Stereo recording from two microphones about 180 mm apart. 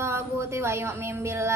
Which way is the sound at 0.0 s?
15° right (ahead or behind).